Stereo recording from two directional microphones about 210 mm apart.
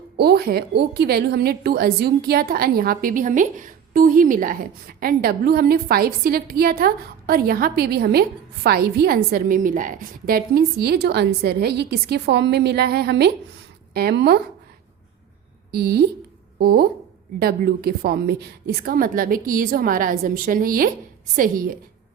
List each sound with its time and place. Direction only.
0.2 s a woman's voice: 50° right (ahead or behind)
15.7 s a woman's voice: 50° right (ahead or behind)